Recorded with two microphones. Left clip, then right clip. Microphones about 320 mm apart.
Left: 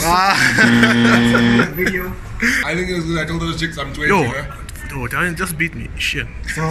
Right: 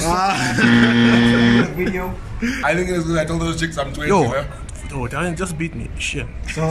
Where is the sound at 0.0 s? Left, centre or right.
Centre.